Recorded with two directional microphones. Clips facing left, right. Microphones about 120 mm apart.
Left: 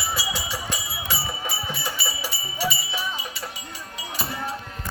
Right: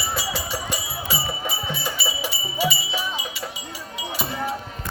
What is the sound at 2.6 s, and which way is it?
Music, 10° right (ahead or behind).